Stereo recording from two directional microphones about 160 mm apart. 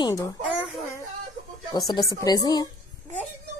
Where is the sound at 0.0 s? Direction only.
20° left (ahead or behind).